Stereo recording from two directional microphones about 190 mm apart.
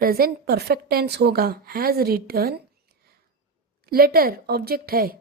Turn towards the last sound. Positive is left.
turn(degrees=-50)  # may be behind; listen again after turning